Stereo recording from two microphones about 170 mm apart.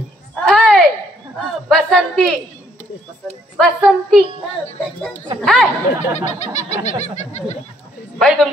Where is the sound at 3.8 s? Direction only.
Centre (ahead or behind).